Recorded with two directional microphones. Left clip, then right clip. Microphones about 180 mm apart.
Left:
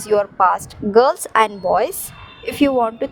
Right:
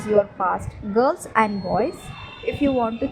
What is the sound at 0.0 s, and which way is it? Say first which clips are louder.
A woman's voice: left 4 dB; 60° left (ahead or behind).